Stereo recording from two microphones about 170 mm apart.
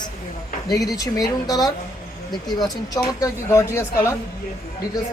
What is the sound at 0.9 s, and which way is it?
A woman's voice, 20° left (ahead or behind).